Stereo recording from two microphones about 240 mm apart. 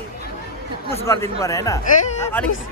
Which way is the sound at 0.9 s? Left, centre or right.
Centre.